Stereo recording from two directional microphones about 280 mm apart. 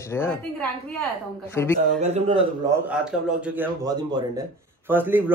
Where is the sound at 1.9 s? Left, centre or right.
Right.